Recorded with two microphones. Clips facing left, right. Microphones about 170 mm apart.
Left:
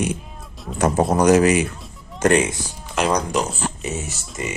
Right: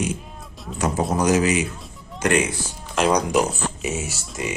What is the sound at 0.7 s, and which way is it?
Speech, 55° left (ahead or behind).